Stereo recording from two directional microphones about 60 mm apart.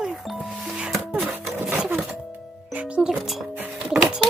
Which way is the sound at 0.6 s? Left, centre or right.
Centre.